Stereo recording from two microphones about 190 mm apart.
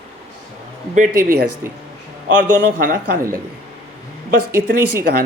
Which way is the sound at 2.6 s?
55° right (ahead or behind).